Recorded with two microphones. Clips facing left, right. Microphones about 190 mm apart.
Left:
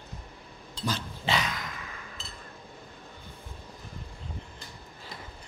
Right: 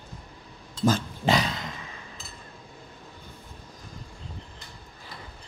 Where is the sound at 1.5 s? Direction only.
25° right (ahead or behind).